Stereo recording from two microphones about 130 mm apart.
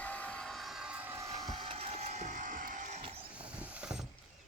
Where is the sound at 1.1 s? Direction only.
25° right (ahead or behind); by 3.0 s 75° right (ahead or behind).